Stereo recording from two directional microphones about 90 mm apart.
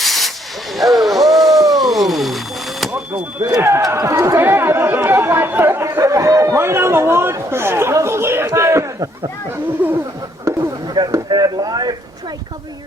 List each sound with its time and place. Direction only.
0.0 s hiss: centre (ahead or behind)
0.8 s a sound: centre (ahead or behind)
3.4 s speech: 35° right (ahead or behind)
6.0 s speech: 35° right (ahead or behind)
9.8 s speech: 20° right (ahead or behind)
10.5 s a sound: 35° right (ahead or behind)
10.8 s speech: 50° right (ahead or behind)